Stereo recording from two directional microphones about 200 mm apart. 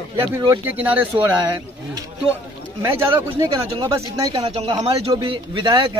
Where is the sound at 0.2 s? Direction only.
20° right (ahead or behind).